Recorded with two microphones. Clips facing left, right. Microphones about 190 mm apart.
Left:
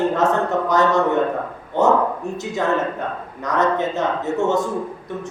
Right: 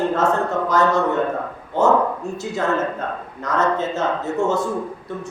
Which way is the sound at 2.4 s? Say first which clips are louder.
Left 1 dB; 20° left (ahead or behind).